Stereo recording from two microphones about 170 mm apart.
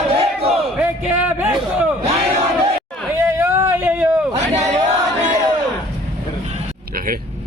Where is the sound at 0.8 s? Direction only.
5° right (ahead or behind).